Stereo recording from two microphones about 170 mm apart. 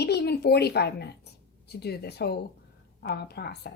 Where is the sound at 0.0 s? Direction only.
75° left (ahead or behind).